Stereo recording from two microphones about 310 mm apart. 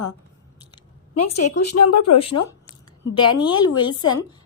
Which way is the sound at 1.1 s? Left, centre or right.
Left.